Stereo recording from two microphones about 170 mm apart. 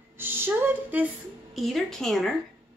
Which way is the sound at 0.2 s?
15° right (ahead or behind).